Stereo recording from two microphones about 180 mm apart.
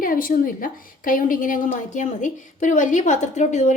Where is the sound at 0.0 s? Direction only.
50° left (ahead or behind).